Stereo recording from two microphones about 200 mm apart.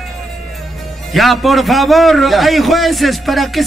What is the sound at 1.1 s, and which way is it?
A man's voice, centre (ahead or behind).